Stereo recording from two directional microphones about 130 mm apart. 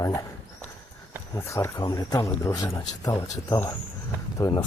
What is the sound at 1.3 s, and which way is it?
Speech, 20° left (ahead or behind).